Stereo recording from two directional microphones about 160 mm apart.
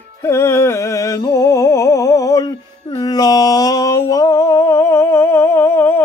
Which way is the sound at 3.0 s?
25° left (ahead or behind).